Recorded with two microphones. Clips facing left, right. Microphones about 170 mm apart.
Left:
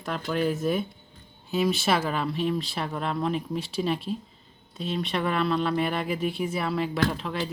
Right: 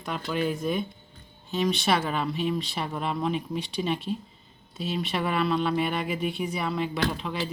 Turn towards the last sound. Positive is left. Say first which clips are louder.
# left 2 dB
turn(degrees=0)  # may be behind; listen again after turning